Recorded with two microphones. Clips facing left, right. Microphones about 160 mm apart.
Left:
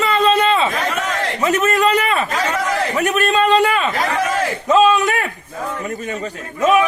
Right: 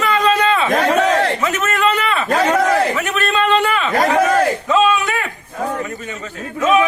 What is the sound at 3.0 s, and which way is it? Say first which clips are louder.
Speech: left 2 dB; 40° left (ahead or behind).